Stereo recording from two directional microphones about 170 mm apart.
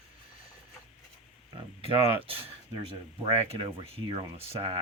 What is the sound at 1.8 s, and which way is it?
Speech, 35° right (ahead or behind).